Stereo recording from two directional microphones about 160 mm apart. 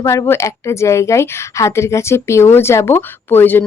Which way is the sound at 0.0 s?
20° left (ahead or behind).